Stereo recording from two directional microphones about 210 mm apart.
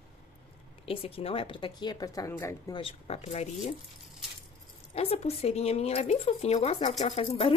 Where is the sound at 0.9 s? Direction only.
25° left (ahead or behind).